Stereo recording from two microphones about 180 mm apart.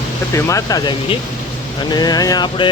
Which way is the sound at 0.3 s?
15° left (ahead or behind).